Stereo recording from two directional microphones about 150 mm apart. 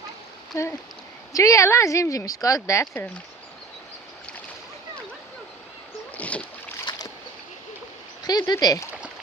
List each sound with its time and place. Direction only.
0.5 s speech: 20° left (ahead or behind)
2.8 s speech: 10° left (ahead or behind)
6.1 s boat: 10° left (ahead or behind)
8.2 s speech: 25° left (ahead or behind)